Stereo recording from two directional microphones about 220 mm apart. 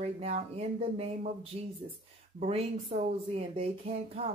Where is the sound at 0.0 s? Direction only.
30° right (ahead or behind).